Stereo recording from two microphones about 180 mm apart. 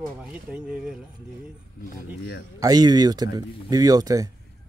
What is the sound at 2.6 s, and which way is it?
Speech, 20° right (ahead or behind).